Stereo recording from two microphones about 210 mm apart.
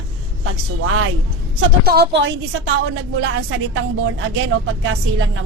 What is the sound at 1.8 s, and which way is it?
Speech, 50° right (ahead or behind).